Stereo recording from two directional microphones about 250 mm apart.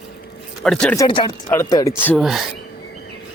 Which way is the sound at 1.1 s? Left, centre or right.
Centre.